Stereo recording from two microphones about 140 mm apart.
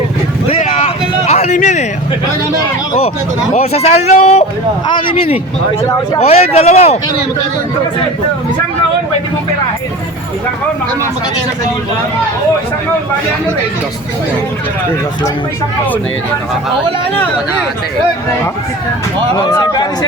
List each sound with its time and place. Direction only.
0.6 s a sound: 55° left (ahead or behind)
3.5 s speech: 50° left (ahead or behind)
4.9 s speech: 35° left (ahead or behind)
19.4 s speech: 30° left (ahead or behind)